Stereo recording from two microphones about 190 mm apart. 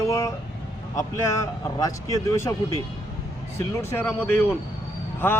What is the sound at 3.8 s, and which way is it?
Speech, 15° left (ahead or behind).